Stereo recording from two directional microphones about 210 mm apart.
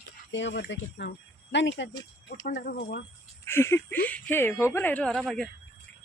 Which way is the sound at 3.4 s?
10° left (ahead or behind).